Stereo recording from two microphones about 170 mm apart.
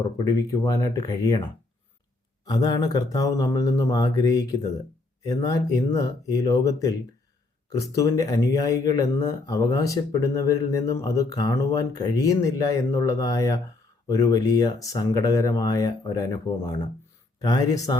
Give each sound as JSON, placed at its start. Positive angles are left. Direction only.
{"t": 0.3, "sound": "speech", "side_deg": 20}
{"t": 2.4, "sound": "speech", "side_deg": 20}
{"t": 17.4, "sound": "speech", "side_deg": 20}